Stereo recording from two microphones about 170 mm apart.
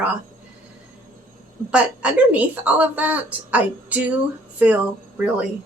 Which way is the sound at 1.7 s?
10° right (ahead or behind).